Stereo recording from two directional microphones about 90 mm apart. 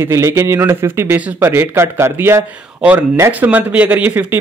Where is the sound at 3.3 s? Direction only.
20° right (ahead or behind).